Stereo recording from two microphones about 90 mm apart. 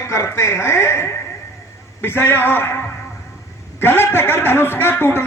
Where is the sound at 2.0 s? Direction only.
25° left (ahead or behind).